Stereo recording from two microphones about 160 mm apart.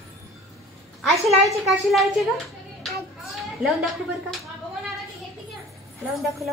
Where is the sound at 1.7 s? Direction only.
Centre (ahead or behind).